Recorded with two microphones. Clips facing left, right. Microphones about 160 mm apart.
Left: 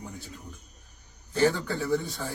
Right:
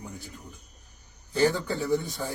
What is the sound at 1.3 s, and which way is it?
Speech, 15° right (ahead or behind).